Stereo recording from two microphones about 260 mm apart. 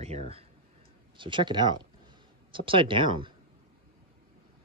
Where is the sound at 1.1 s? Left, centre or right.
Centre.